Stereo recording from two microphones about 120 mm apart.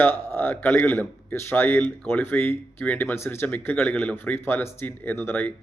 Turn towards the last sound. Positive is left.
turn(degrees=15)  # may be behind; listen again after turning